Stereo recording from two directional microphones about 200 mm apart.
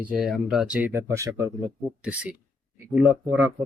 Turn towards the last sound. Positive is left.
turn(degrees=-10)  # may be behind; listen again after turning